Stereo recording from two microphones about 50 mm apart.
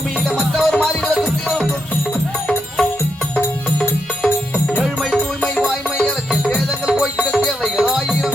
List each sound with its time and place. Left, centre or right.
0.5 s music: centre
3.3 s music: centre
7.3 s music: centre